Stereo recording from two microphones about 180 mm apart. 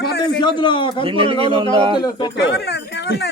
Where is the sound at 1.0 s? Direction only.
30° right (ahead or behind).